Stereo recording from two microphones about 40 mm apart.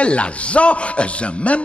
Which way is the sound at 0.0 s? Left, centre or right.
Left.